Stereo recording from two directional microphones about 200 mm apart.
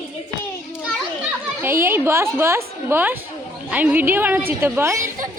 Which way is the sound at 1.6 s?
10° right (ahead or behind).